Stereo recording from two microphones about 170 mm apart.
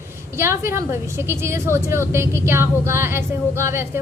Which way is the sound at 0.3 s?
15° right (ahead or behind).